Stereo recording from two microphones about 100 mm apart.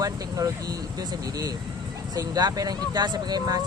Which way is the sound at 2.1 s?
35° right (ahead or behind).